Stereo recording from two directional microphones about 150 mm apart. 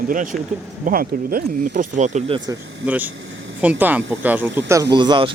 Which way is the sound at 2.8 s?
10° right (ahead or behind).